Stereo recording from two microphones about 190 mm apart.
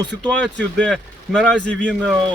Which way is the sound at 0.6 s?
5° left (ahead or behind).